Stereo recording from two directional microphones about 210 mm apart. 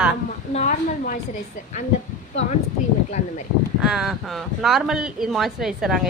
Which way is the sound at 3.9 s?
Centre (ahead or behind).